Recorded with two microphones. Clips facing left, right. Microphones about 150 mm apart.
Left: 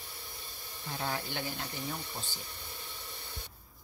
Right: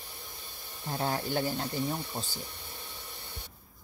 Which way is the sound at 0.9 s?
40° right (ahead or behind).